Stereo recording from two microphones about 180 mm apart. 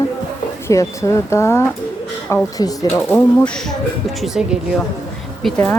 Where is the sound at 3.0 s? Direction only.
5° left (ahead or behind).